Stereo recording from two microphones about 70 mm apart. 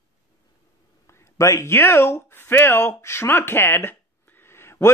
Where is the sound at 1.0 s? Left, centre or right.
Left.